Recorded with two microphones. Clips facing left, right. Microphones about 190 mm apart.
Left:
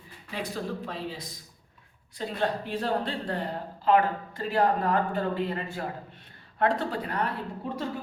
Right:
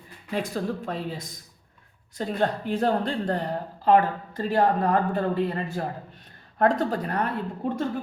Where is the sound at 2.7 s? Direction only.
45° right (ahead or behind).